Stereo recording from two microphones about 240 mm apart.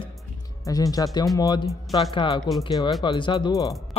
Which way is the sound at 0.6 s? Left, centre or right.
Centre.